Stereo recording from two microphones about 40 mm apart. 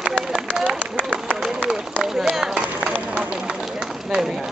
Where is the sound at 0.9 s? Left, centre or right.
Right.